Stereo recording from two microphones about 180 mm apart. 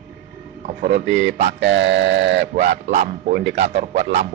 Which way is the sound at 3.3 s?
60° right (ahead or behind).